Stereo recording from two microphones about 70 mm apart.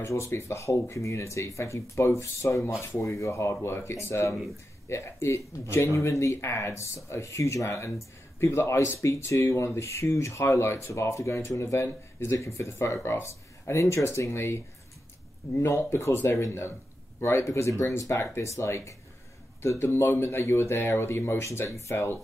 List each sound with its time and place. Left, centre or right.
0.0 s speech: left